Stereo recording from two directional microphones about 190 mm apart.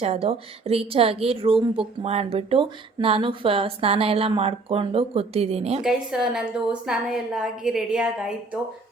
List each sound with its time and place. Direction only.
0.0 s a woman's voice: 30° right (ahead or behind)
5.8 s a woman's voice: 5° right (ahead or behind)